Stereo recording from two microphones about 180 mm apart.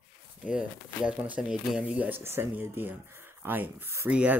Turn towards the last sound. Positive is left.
turn(degrees=-5)  # may be behind; listen again after turning